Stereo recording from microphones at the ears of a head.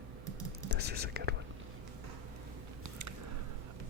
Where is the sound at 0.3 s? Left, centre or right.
Right.